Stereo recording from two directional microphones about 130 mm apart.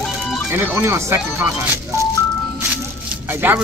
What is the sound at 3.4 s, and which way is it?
Speech, 15° right (ahead or behind).